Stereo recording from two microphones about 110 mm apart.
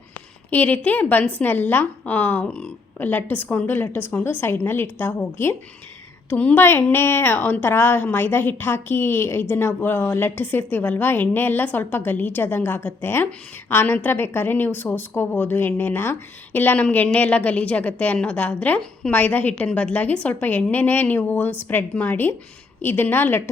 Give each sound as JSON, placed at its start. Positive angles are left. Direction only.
{"t": 0.5, "sound": "a woman's voice", "side_deg": 15}